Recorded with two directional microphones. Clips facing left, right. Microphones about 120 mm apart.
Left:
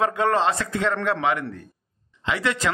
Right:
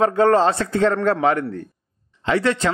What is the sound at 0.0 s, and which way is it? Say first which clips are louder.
A man's voice: right 6 dB; 30° right (ahead or behind).